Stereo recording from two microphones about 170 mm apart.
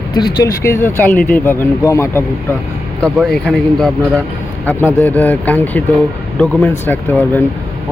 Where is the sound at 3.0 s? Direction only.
5° left (ahead or behind).